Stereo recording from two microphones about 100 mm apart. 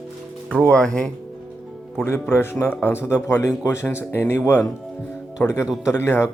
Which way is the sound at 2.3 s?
20° left (ahead or behind).